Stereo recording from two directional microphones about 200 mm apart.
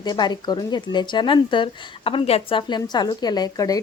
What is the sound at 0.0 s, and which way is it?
Speech, 20° left (ahead or behind).